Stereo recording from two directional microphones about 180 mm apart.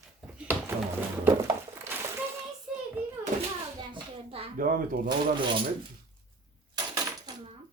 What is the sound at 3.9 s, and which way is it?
Hands, 30° right (ahead or behind).